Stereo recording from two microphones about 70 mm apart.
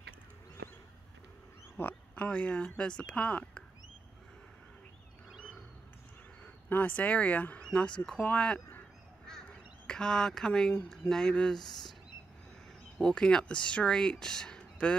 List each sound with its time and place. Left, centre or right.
1.8 s speech: left
6.4 s speech: left
9.3 s crow: centre
10.9 s speech: centre
13.0 s speech: centre